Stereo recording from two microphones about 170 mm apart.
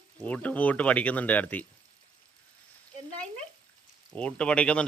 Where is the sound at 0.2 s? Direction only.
10° left (ahead or behind).